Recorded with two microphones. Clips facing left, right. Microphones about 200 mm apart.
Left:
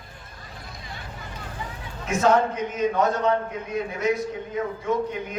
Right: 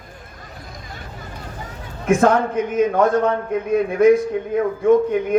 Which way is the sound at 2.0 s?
50° right (ahead or behind).